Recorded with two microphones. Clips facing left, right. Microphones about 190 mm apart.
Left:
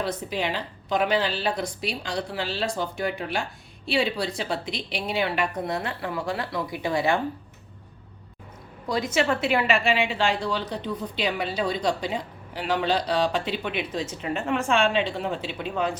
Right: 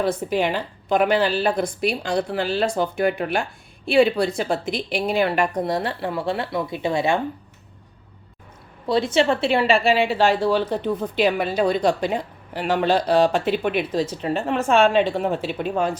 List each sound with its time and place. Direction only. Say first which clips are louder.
0.0 s a woman's voice: right 6 dB; 50° right (ahead or behind); by 7.2 s 25° right (ahead or behind)
8.9 s a woman's voice: right 5 dB; 30° right (ahead or behind); by 15.9 s 45° right (ahead or behind)